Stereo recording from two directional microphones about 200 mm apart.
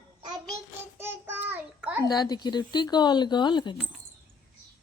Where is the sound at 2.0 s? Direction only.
20° left (ahead or behind).